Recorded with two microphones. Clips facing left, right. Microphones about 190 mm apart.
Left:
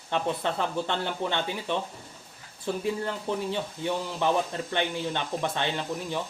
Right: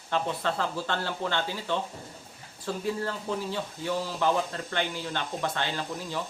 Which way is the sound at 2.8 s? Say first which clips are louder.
Even; 20° left (ahead or behind).